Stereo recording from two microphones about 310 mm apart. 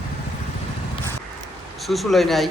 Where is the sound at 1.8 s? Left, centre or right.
Centre.